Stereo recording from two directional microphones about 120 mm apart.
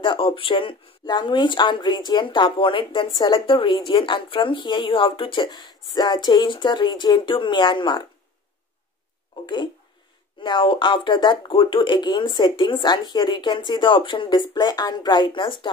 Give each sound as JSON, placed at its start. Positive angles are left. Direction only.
{"t": 0.0, "sound": "speech", "side_deg": 45}
{"t": 10.4, "sound": "speech", "side_deg": 40}